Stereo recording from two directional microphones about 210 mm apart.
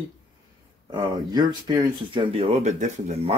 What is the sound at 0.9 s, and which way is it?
Speech, 20° right (ahead or behind).